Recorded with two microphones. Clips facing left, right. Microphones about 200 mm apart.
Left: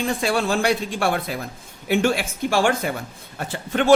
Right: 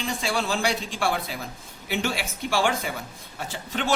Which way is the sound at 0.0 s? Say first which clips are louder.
Left 6 dB; 55° left (ahead or behind).